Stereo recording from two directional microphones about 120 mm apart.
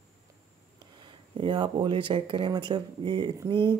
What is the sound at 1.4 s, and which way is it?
Speech, 40° right (ahead or behind).